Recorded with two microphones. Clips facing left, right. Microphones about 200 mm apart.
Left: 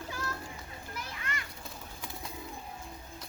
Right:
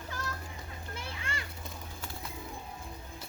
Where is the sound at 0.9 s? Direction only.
30° right (ahead or behind).